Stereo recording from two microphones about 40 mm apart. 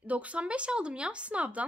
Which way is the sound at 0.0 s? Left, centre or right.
Right.